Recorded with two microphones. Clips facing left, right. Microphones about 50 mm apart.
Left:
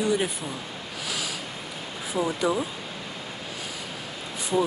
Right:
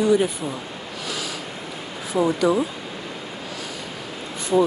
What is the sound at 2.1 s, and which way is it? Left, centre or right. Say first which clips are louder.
Speech: right 6 dB; right.